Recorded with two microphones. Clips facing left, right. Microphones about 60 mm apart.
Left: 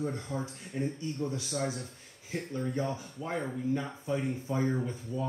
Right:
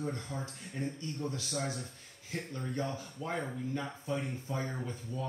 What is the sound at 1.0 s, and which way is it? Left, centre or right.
Speech, centre.